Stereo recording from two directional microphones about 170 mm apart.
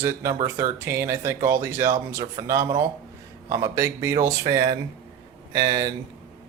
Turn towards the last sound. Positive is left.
turn(degrees=-25)  # may be behind; listen again after turning